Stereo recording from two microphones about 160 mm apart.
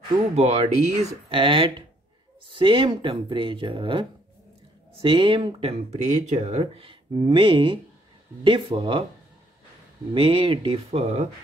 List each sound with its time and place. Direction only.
0.4 s speech: 40° right (ahead or behind)
10.1 s speech: 35° right (ahead or behind)